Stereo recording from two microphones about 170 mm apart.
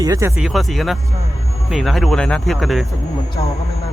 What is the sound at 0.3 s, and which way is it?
Speech, centre (ahead or behind).